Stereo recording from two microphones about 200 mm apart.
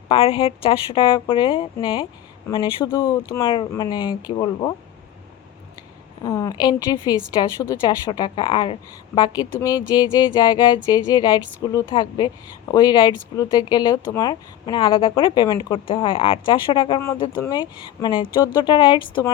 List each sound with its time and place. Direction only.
0.1 s speech: 25° left (ahead or behind)
6.2 s speech: 15° left (ahead or behind)